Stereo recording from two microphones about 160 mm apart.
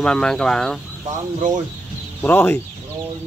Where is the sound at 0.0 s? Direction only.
5° left (ahead or behind).